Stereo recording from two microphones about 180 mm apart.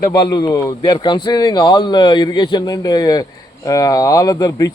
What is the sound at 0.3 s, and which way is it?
Speech, 20° left (ahead or behind).